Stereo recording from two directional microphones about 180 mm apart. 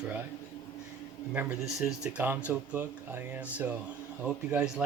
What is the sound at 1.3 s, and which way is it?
Speech, 10° right (ahead or behind).